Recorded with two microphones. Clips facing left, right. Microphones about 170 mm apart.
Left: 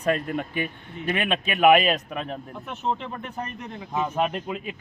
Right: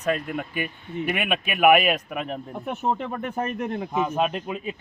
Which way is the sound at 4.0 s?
10° right (ahead or behind).